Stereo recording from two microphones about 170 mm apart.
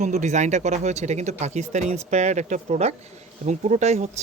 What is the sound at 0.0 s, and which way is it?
Speech, 45° right (ahead or behind).